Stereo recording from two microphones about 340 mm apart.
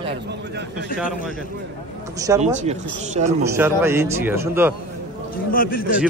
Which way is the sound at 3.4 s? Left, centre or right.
Centre.